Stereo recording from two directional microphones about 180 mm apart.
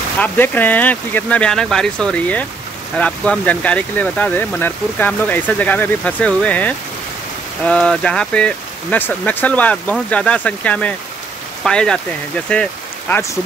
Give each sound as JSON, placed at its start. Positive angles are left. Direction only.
{"t": 0.2, "sound": "speech", "side_deg": 10}